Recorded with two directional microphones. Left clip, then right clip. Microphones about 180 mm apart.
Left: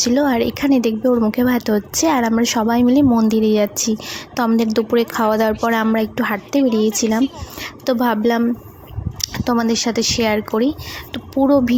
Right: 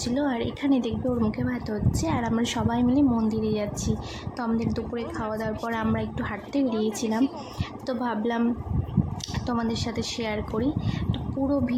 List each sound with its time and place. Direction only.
0.0 s a woman's voice: 35° left (ahead or behind)